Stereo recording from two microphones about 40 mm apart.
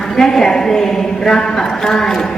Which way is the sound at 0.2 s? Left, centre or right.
Centre.